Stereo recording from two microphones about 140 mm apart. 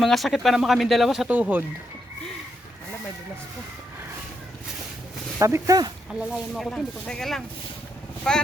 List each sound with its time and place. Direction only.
0.0 s speech: centre (ahead or behind)
1.3 s speech: 10° right (ahead or behind)
5.4 s speech: 20° right (ahead or behind)
6.1 s speech: centre (ahead or behind)